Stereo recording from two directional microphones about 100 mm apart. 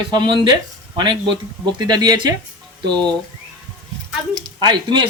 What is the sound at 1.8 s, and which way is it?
Speech, 45° right (ahead or behind).